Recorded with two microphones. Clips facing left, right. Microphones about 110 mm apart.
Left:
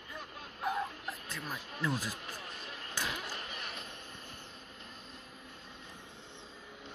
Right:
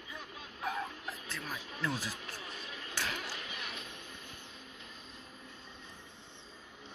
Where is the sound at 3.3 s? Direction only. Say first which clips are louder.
Even; 45° left (ahead or behind).